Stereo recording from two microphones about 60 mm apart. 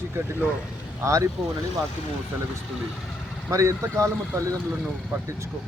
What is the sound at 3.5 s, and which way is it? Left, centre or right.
Speech, right.